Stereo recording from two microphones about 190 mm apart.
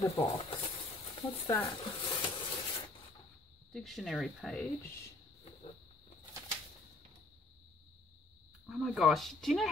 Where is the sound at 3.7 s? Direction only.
Centre (ahead or behind).